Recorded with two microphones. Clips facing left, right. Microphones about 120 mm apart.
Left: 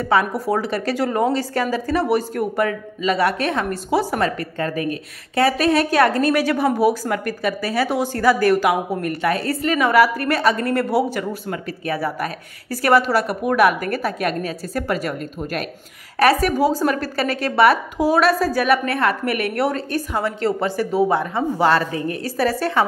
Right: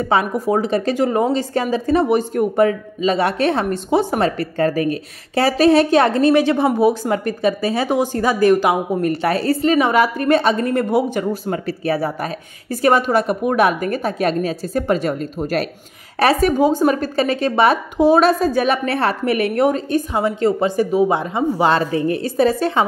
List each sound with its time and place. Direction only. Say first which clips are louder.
0.1 s a woman's voice: right 1 dB; 20° right (ahead or behind)
11.4 s a woman's voice: right 5 dB; 30° right (ahead or behind)
16.2 s a woman's voice: right 2 dB; 25° right (ahead or behind)